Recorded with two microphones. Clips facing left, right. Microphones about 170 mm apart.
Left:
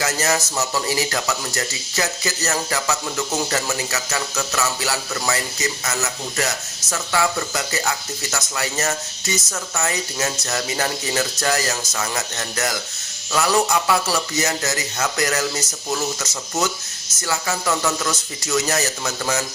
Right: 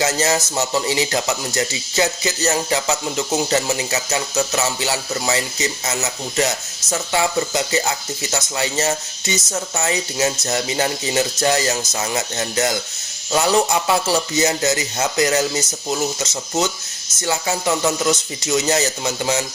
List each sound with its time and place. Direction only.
0.0 s speech: 25° right (ahead or behind)